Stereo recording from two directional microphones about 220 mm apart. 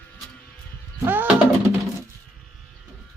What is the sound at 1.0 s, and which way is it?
Music, 10° right (ahead or behind).